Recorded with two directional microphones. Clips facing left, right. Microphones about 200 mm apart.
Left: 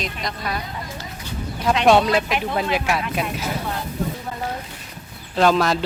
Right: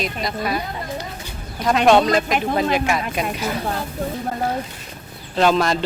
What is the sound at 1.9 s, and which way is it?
Speech, 10° left (ahead or behind).